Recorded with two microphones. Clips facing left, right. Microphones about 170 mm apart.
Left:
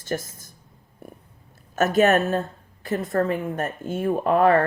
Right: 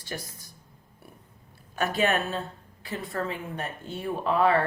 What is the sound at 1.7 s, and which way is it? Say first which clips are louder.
Speech: left 7 dB; 45° left (ahead or behind).